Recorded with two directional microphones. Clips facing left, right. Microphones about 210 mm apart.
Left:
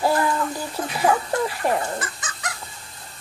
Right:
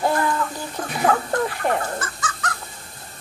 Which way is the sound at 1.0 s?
5° left (ahead or behind).